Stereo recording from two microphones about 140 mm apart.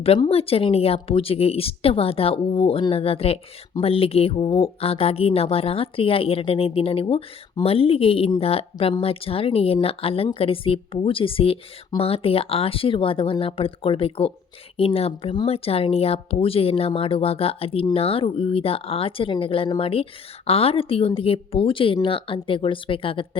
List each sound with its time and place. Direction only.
0.3 s speech: 45° left (ahead or behind)